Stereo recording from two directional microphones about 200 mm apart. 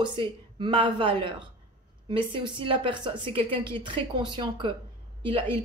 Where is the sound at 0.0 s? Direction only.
25° right (ahead or behind).